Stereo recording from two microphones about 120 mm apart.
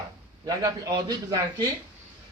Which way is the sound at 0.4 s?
35° right (ahead or behind).